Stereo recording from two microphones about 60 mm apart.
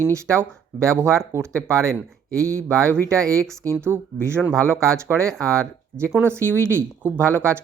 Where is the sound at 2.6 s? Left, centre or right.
Right.